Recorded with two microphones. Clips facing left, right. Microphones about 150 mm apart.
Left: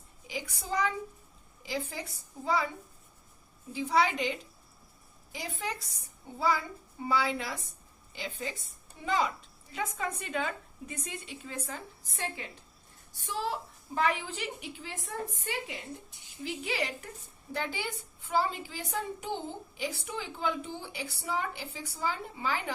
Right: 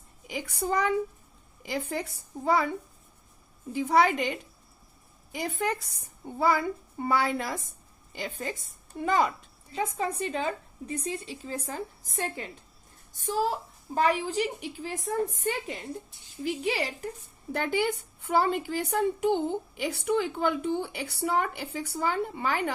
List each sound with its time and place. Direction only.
0.3 s a woman's voice: 60° right (ahead or behind)
3.7 s a child's voice: 55° right (ahead or behind)
9.7 s a woman's voice: 30° right (ahead or behind)
16.4 s a woman's voice: 35° right (ahead or behind)
17.5 s a woman's voice: 55° right (ahead or behind)